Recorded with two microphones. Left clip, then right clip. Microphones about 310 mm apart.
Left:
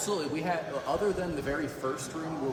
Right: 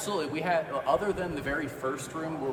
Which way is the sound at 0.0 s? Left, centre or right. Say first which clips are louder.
Right 1 dB; centre.